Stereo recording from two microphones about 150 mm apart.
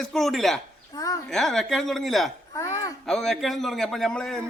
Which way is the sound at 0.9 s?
25° left (ahead or behind).